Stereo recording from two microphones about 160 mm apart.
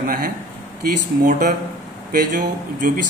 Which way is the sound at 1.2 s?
55° right (ahead or behind).